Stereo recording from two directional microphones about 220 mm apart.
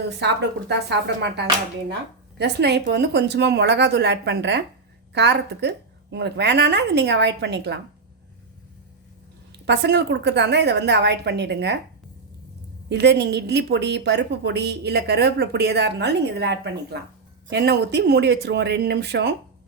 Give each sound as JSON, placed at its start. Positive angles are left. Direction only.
{"t": 0.7, "sound": "a woman's voice", "side_deg": -50}
{"t": 9.5, "sound": "a woman's voice", "side_deg": -50}
{"t": 12.9, "sound": "a woman's voice", "side_deg": -50}